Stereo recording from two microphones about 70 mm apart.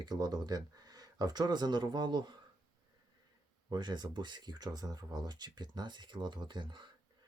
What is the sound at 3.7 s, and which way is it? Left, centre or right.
Speech, right.